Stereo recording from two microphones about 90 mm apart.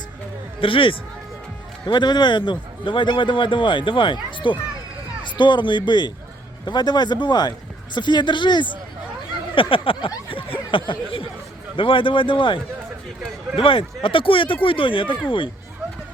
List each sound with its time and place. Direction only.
0.6 s speech: 75° left (ahead or behind)
1.9 s a man's voice: 55° left (ahead or behind)
9.6 s speech: 80° left
13.6 s speech: 80° left